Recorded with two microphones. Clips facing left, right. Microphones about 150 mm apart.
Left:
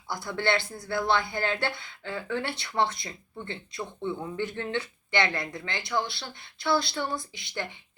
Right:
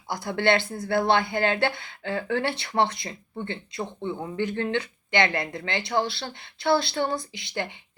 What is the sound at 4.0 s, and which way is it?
Speech, 20° right (ahead or behind).